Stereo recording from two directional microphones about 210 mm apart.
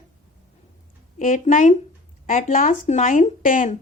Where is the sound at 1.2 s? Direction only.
40° left (ahead or behind).